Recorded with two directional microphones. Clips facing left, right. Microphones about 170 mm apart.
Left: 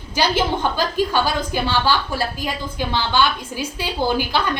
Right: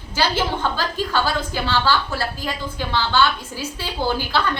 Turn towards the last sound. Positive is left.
turn(degrees=15)  # may be behind; listen again after turning